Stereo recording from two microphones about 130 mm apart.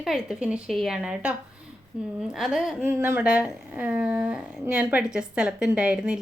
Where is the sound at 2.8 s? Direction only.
15° right (ahead or behind).